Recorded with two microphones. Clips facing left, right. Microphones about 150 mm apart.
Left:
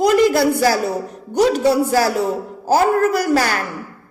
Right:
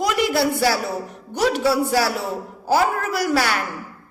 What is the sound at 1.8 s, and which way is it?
A woman's voice, 40° left (ahead or behind).